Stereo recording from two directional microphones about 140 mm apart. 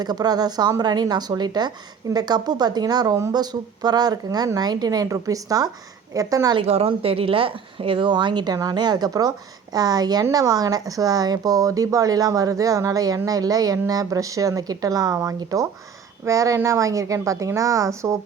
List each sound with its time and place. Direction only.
0.0 s a woman's voice: 30° right (ahead or behind)
6.6 s a woman's voice: 45° right (ahead or behind); by 18.2 s 20° right (ahead or behind)